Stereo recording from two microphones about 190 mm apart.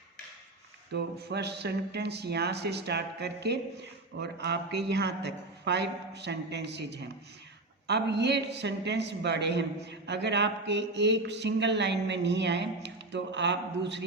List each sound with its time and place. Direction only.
0.9 s a woman's voice: 60° right (ahead or behind)